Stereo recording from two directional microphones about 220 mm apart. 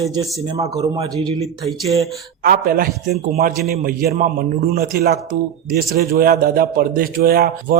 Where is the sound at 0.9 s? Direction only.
25° right (ahead or behind).